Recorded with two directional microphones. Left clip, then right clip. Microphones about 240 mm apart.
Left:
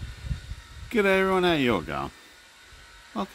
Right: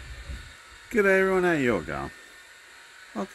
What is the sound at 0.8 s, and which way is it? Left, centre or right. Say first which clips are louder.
Speech: right 1 dB; centre.